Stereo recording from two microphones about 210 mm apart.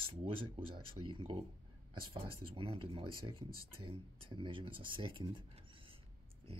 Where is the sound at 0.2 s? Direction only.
25° right (ahead or behind).